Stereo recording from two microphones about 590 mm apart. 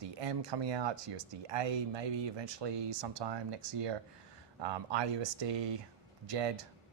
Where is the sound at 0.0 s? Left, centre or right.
Right.